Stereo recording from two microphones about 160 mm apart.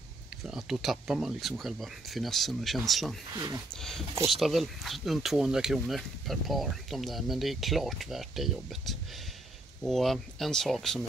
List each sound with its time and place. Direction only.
0.5 s speech: 5° right (ahead or behind)
3.3 s speech: 20° right (ahead or behind)
4.4 s speech: centre (ahead or behind)